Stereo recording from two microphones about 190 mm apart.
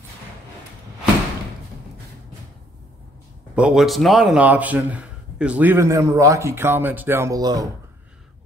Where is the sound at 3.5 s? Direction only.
5° right (ahead or behind); by 7.6 s 20° right (ahead or behind).